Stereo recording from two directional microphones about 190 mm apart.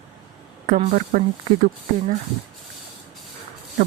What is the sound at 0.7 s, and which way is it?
Speech, 45° right (ahead or behind).